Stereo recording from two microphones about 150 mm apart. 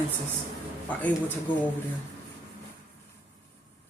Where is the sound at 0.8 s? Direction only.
10° left (ahead or behind).